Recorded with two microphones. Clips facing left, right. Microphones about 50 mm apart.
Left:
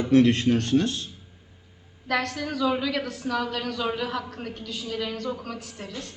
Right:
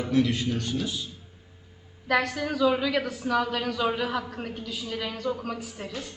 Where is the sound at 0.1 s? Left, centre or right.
Left.